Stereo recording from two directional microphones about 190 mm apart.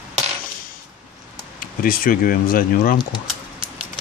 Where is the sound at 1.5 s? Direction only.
50° left (ahead or behind).